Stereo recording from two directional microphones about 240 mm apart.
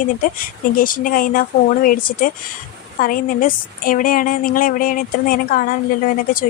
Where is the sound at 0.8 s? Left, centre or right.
Left.